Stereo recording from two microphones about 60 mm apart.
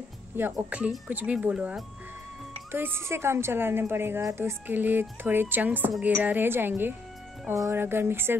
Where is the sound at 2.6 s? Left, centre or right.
Right.